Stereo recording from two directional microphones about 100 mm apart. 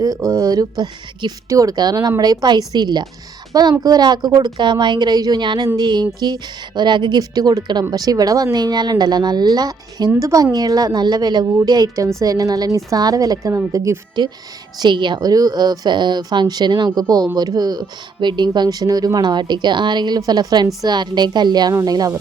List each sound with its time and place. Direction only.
0.3 s a woman's voice: 35° right (ahead or behind)
14.8 s a woman's voice: 50° right (ahead or behind)